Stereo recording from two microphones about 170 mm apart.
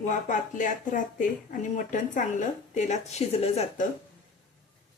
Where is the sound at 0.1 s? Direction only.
50° left (ahead or behind).